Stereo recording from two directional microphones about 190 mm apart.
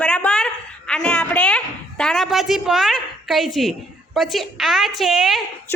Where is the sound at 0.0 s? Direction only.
5° left (ahead or behind).